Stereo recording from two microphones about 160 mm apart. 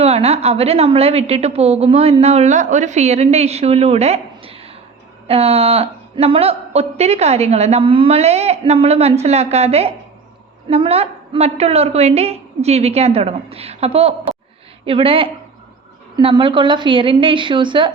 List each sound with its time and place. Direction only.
0.0 s a woman's voice: 40° right (ahead or behind)